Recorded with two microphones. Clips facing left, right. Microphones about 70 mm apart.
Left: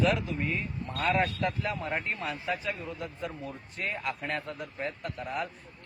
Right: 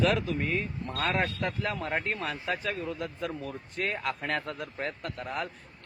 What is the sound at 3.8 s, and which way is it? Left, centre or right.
Speech, right.